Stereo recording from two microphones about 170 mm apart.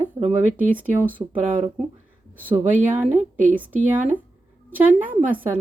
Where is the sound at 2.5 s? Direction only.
10° right (ahead or behind).